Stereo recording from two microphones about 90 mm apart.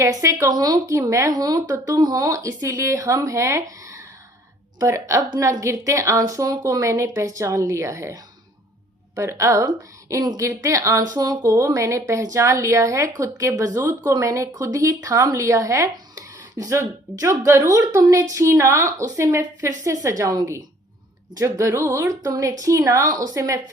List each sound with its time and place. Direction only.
0.1 s a woman's voice: 35° right (ahead or behind)
11.5 s a woman's voice: 35° right (ahead or behind)